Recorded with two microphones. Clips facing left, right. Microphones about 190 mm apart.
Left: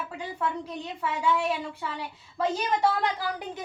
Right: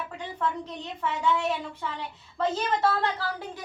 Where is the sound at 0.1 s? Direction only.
10° left (ahead or behind).